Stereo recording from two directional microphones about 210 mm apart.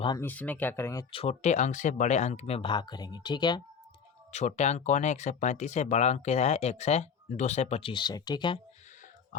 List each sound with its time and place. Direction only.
0.2 s speech: 10° left (ahead or behind)
1.1 s speech: 30° left (ahead or behind)
4.3 s speech: 35° left (ahead or behind)